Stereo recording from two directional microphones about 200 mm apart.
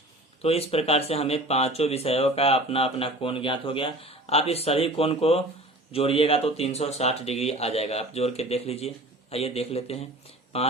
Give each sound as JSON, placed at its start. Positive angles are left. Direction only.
{"t": 0.4, "sound": "speech", "side_deg": 30}